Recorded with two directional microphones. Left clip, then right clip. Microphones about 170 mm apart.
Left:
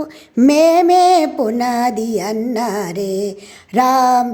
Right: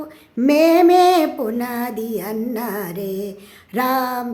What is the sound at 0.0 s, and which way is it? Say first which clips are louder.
Female singing: left 6 dB; 40° left (ahead or behind).